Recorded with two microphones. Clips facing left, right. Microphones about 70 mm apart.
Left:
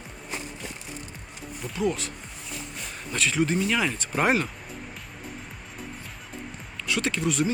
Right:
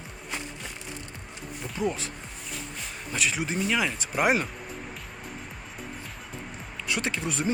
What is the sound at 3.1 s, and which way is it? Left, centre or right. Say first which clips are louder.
Speech: left 4 dB; centre.